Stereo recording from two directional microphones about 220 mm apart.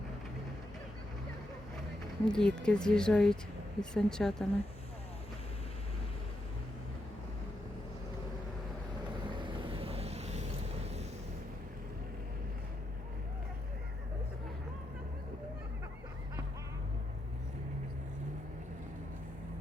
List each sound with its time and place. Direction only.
2.2 s a woman's voice: 5° left (ahead or behind)
9.4 s boat: 25° right (ahead or behind)